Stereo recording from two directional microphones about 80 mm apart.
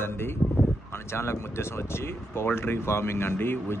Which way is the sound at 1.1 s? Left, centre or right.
Left.